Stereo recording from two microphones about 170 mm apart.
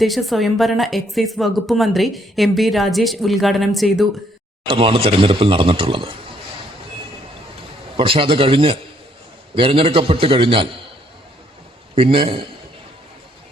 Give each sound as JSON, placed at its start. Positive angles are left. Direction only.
{"t": 0.0, "sound": "a woman's voice", "side_deg": 0}
{"t": 4.7, "sound": "speech", "side_deg": -30}
{"t": 7.9, "sound": "speech", "side_deg": -30}
{"t": 11.9, "sound": "speech", "side_deg": -30}